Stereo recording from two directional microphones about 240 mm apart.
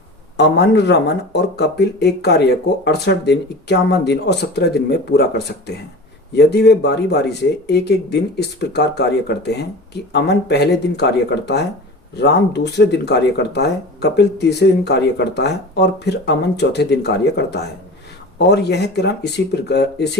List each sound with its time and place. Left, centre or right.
0.3 s speech: left